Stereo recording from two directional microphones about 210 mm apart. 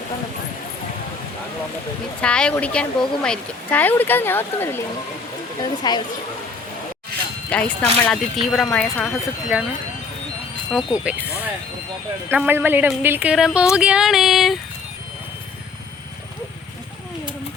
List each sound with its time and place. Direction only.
2.2 s speech: 5° left (ahead or behind)
7.5 s speech: 5° left (ahead or behind)
10.7 s speech: centre (ahead or behind)